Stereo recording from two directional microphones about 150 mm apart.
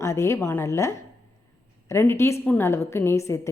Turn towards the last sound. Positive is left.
turn(degrees=20)  # may be behind; listen again after turning